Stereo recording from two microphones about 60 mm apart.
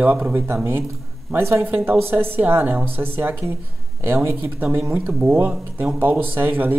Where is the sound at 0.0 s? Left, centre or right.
Right.